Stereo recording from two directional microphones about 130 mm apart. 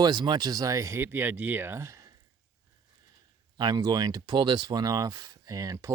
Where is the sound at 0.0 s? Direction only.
35° right (ahead or behind).